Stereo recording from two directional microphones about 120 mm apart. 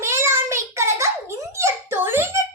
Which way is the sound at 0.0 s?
20° right (ahead or behind).